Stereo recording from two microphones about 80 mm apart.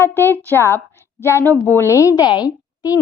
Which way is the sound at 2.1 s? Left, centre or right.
Left.